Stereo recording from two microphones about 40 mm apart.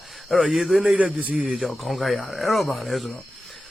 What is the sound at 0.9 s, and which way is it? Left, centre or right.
Speech, right.